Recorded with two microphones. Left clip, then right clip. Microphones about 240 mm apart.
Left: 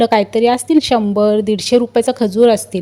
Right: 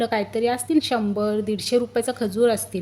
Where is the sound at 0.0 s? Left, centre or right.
Left.